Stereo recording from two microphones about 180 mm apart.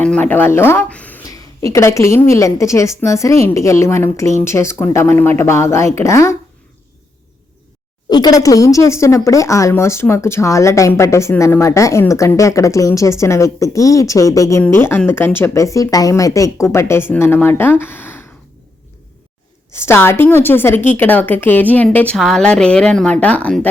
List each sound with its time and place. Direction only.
0.0 s speech: 10° left (ahead or behind)
1.2 s a woman's voice: 20° left (ahead or behind)
8.1 s a woman's voice: 20° left (ahead or behind)
19.7 s a woman's voice: 15° left (ahead or behind)